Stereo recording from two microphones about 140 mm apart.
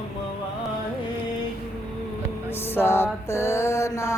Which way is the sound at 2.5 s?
15° left (ahead or behind).